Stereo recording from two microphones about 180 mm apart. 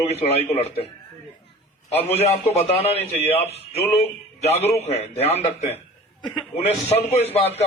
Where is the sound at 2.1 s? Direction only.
35° left (ahead or behind).